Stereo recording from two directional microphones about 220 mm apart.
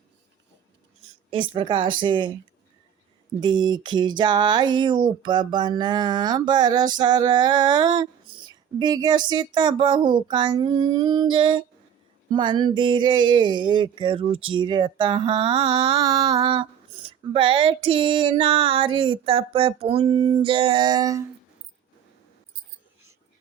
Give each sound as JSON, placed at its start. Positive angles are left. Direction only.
{"t": 1.3, "sound": "speech", "side_deg": -25}
{"t": 3.4, "sound": "speech", "side_deg": -20}